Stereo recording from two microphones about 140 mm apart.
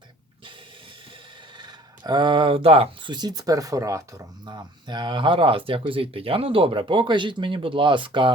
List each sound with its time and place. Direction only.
1.5 s speech: 30° right (ahead or behind)